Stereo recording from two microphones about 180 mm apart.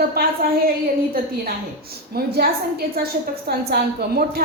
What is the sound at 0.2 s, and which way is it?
Speech, 60° right (ahead or behind).